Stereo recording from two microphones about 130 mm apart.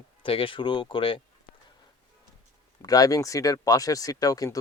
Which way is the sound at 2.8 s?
30° left (ahead or behind).